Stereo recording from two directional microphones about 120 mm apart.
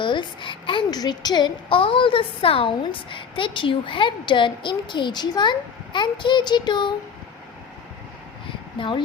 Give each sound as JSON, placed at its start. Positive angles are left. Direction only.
{"t": 0.0, "sound": "a woman's voice", "side_deg": 40}
{"t": 8.8, "sound": "speech", "side_deg": 45}